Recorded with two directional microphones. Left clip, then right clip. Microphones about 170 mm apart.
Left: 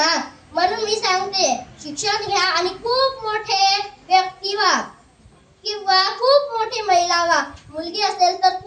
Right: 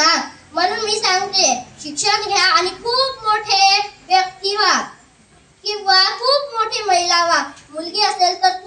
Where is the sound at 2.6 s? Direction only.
15° left (ahead or behind).